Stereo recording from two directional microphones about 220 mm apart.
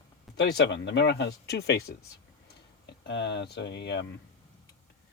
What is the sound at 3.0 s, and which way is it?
Speech, 50° left (ahead or behind).